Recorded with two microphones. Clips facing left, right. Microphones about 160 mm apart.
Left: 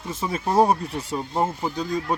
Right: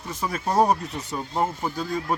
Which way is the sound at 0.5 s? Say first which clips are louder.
Left 2 dB; 5° left (ahead or behind).